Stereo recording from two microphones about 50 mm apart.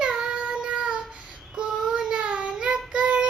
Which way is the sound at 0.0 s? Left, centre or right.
Centre.